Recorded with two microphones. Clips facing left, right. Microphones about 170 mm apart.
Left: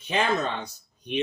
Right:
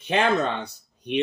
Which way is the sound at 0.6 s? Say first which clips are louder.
Right 4 dB; 65° right (ahead or behind).